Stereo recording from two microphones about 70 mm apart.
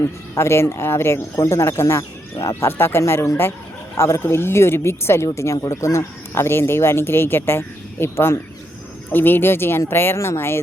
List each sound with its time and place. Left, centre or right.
0.0 s speech: left